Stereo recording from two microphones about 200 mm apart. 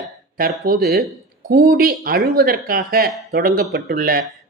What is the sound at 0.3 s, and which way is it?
Speech, 45° right (ahead or behind).